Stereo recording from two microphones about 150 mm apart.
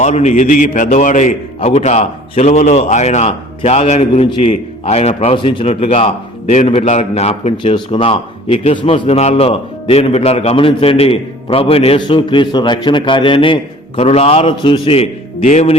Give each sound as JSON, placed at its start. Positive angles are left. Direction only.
{"t": 0.0, "sound": "a man's voice", "side_deg": 50}